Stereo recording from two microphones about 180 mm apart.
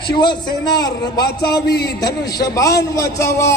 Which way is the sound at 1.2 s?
65° left (ahead or behind).